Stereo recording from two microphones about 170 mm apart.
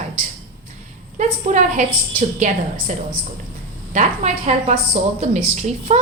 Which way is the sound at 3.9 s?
40° right (ahead or behind).